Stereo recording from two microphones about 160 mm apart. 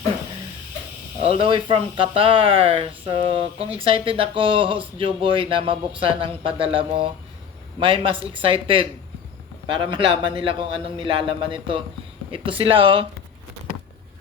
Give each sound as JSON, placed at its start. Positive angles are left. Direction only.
{"t": 1.2, "sound": "speech", "side_deg": -35}